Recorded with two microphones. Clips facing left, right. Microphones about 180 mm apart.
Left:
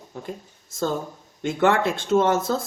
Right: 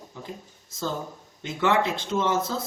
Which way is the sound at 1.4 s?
50° left (ahead or behind).